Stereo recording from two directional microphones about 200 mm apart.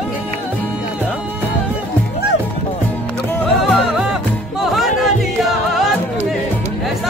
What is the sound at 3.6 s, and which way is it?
Music, centre (ahead or behind).